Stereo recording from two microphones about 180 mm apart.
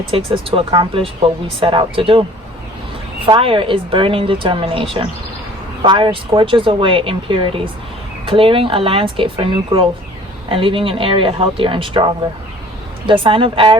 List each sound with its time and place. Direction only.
0.1 s speech: 30° right (ahead or behind)
3.2 s speech: 30° right (ahead or behind)